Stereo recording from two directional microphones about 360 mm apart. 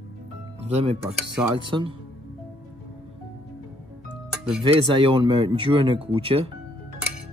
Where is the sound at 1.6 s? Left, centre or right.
Centre.